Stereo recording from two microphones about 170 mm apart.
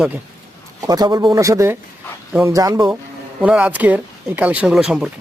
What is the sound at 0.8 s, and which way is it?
Speech, 20° right (ahead or behind).